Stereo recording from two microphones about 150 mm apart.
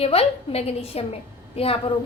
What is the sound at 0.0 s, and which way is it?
A woman's voice, 40° left (ahead or behind).